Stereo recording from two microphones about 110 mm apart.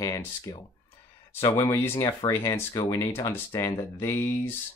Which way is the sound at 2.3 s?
20° left (ahead or behind).